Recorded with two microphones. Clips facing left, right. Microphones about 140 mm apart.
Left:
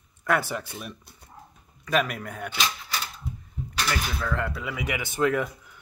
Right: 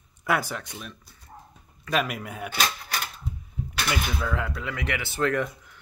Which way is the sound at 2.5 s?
55° right (ahead or behind).